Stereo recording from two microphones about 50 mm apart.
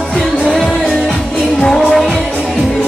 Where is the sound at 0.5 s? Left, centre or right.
Centre.